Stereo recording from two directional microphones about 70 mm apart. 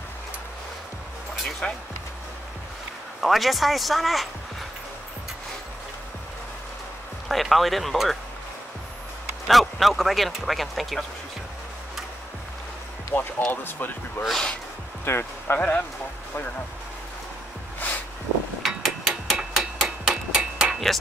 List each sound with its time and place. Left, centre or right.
1.3 s speech: centre
3.2 s speech: centre
7.2 s speech: centre
9.5 s speech: centre
13.1 s speech: left
14.2 s speech: centre
15.0 s speech: left
17.7 s a sound: left
18.6 s a sound: centre
19.5 s tick-tock: centre
20.9 s speech: centre